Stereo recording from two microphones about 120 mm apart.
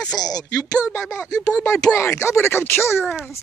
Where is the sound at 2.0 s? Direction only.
20° left (ahead or behind).